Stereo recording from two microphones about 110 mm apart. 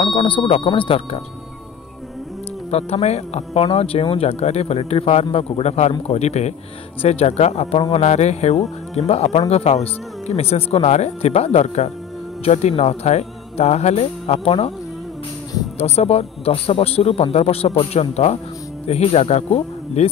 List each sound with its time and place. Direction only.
0.0 s speech: 50° left (ahead or behind)
2.7 s a man's voice: 75° left (ahead or behind)
7.0 s a man's voice: 70° left (ahead or behind); by 8.5 s 90° left
8.9 s a man's voice: 70° left (ahead or behind)
15.8 s a man's voice: 70° left (ahead or behind)